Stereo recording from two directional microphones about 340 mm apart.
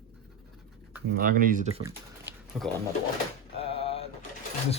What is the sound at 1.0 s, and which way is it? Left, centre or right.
Speech, right.